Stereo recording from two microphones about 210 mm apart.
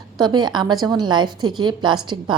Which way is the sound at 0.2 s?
20° right (ahead or behind).